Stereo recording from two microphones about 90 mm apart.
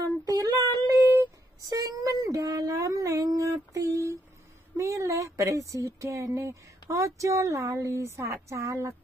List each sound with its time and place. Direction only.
0.0 s child singing: 45° right (ahead or behind)
1.7 s a sound: 45° right (ahead or behind)
4.7 s speech: 35° right (ahead or behind)